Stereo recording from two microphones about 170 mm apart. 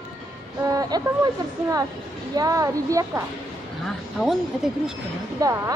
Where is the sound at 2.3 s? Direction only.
20° right (ahead or behind).